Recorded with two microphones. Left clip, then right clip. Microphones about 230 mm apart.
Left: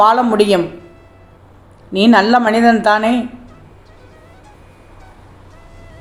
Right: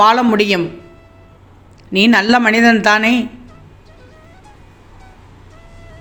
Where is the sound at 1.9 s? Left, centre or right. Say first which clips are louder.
Even; right.